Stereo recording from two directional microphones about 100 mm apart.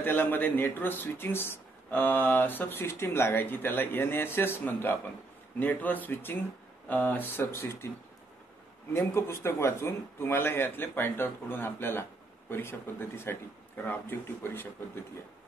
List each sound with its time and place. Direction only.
0.0 s speech: 20° left (ahead or behind)
8.9 s speech: 25° left (ahead or behind)